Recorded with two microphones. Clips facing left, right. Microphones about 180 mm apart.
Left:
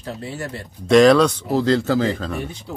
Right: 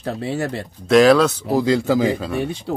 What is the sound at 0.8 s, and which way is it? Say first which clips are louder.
Speech: even; 5° right (ahead or behind).